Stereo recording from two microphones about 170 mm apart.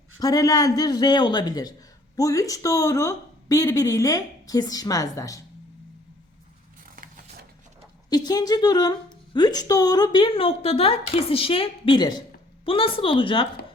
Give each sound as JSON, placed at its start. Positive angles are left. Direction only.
{"t": 0.2, "sound": "a woman's voice", "side_deg": 20}
{"t": 6.8, "sound": "a sound", "side_deg": -55}
{"t": 8.1, "sound": "a woman's voice", "side_deg": 25}